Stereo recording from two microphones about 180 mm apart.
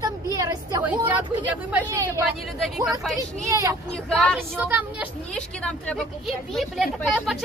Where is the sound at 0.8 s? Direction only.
10° right (ahead or behind).